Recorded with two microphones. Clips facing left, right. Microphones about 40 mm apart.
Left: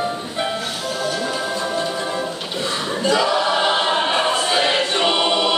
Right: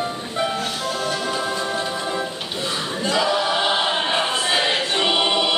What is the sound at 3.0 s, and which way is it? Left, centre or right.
Choir, centre.